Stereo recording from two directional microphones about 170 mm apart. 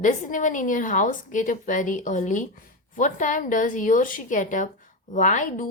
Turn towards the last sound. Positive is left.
turn(degrees=50)  # may be behind; listen again after turning